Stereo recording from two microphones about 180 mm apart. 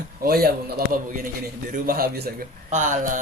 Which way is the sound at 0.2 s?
60° right (ahead or behind).